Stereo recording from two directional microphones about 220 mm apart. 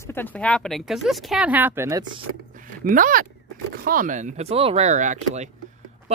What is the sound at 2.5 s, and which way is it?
Zipper, 35° right (ahead or behind).